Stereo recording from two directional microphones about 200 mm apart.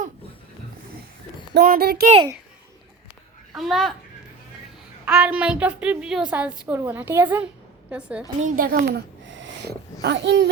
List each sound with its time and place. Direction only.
1.5 s a child's voice: 50° right (ahead or behind)
3.5 s a child's voice: centre (ahead or behind)
5.0 s a woman's voice: 5° right (ahead or behind)
8.4 s a child's voice: 40° right (ahead or behind)
9.2 s a sound: 65° right (ahead or behind)